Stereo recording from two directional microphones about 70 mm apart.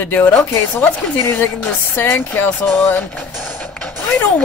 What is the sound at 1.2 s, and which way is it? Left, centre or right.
Speech, left.